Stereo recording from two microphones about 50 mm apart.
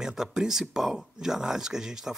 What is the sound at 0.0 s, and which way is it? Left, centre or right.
Speech, centre.